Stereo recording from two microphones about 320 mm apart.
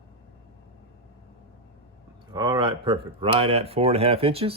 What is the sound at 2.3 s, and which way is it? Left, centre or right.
Speech, centre.